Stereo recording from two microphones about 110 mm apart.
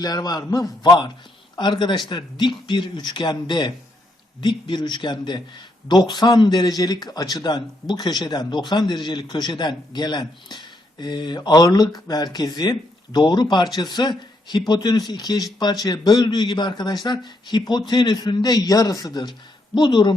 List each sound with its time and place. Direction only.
0.0 s a man's voice: 35° left (ahead or behind)